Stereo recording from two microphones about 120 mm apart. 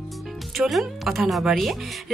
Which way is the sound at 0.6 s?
Centre (ahead or behind).